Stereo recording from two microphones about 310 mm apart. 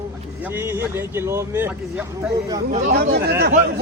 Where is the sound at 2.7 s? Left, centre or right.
Right.